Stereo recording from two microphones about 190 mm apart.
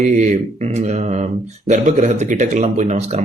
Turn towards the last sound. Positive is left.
turn(degrees=-35)  # may be behind; listen again after turning